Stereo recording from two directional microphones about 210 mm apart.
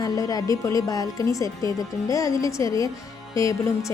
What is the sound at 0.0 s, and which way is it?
A woman's voice, 15° left (ahead or behind).